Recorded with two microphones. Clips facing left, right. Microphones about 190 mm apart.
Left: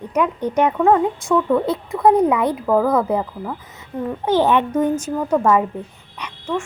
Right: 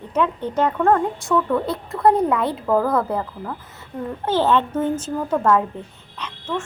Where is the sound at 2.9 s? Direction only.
15° left (ahead or behind).